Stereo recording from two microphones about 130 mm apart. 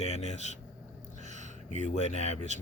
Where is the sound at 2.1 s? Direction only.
60° left (ahead or behind).